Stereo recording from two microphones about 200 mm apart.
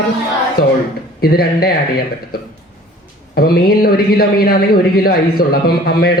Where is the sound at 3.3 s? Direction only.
50° left (ahead or behind).